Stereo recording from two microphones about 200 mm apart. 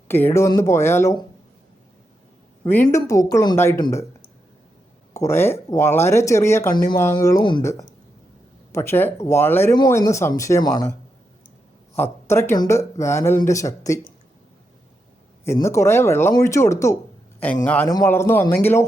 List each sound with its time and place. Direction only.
0.1 s speech: 10° left (ahead or behind)
2.6 s speech: 10° left (ahead or behind)
5.1 s speech: 15° left (ahead or behind)
6.7 s speech: 45° left (ahead or behind)
7.2 s speech: 15° left (ahead or behind)
11.9 s speech: 10° left (ahead or behind)
15.4 s speech: 15° left (ahead or behind)